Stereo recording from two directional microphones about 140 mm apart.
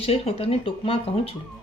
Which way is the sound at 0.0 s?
45° left (ahead or behind).